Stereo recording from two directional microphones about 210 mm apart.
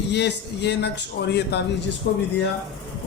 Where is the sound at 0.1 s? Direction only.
55° left (ahead or behind).